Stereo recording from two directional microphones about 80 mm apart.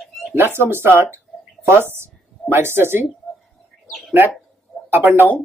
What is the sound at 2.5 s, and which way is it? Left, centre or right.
Speech, right.